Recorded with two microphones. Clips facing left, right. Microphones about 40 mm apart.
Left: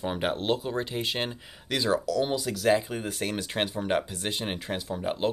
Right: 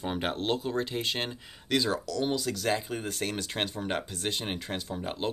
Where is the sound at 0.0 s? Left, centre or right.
Centre.